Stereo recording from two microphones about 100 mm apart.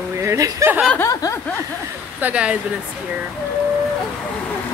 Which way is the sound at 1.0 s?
30° left (ahead or behind).